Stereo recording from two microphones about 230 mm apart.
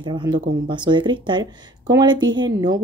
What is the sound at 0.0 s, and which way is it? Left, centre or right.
A woman's voice, centre.